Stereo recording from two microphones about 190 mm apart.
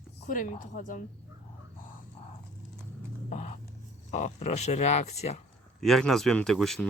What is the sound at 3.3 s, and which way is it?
Speech, 35° left (ahead or behind).